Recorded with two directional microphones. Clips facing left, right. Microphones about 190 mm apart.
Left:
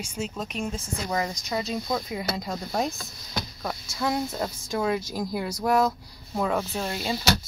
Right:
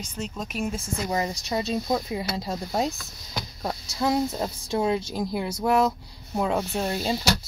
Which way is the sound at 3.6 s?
25° right (ahead or behind).